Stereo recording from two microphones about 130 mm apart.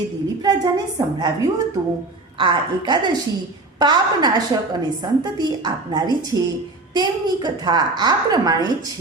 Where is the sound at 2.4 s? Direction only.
35° right (ahead or behind).